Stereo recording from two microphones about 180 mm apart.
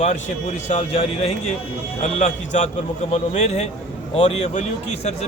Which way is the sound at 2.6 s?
35° left (ahead or behind).